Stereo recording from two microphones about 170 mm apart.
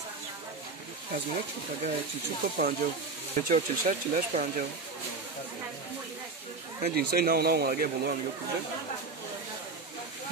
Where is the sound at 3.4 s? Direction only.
55° right (ahead or behind).